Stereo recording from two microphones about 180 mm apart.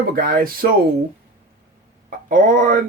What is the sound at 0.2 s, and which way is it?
Speech, 55° right (ahead or behind).